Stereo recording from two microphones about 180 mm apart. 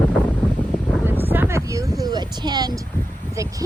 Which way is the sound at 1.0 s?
10° right (ahead or behind).